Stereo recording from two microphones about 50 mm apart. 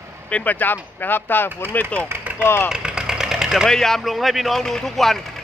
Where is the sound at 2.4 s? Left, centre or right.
Left.